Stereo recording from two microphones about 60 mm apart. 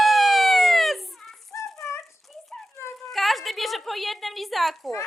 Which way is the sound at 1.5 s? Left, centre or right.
Left.